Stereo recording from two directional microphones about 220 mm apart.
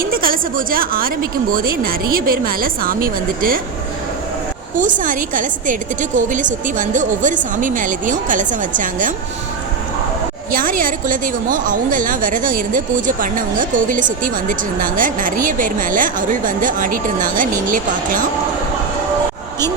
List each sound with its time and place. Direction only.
0.0 s a woman's voice: 40° right (ahead or behind)
4.8 s a woman's voice: 35° right (ahead or behind)
10.5 s a woman's voice: 40° right (ahead or behind)